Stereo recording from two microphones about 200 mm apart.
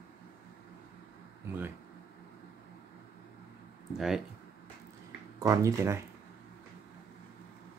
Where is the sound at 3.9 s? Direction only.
Centre (ahead or behind).